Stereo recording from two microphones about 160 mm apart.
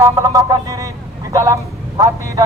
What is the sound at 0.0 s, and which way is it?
Speech, 20° right (ahead or behind).